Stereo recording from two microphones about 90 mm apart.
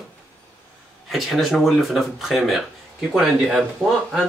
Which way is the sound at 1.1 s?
Centre (ahead or behind).